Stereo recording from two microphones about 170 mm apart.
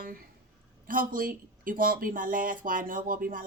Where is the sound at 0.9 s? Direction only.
55° right (ahead or behind).